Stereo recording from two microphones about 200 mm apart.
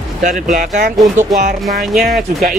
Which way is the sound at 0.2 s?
40° right (ahead or behind).